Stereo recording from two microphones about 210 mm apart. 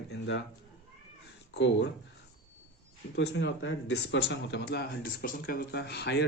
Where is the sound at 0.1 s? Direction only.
60° left (ahead or behind).